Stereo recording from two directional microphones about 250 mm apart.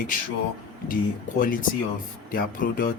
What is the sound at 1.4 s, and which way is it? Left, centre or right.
Speech, left.